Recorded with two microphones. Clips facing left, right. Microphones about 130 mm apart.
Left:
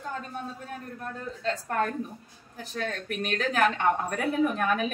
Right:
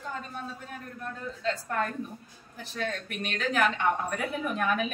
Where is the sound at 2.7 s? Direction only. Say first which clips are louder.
Left 2 dB; 40° left (ahead or behind).